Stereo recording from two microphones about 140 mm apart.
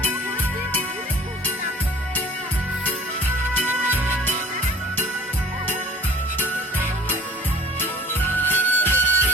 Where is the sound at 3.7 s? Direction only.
15° right (ahead or behind).